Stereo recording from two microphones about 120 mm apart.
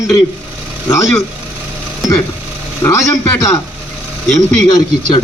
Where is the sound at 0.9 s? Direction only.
25° left (ahead or behind).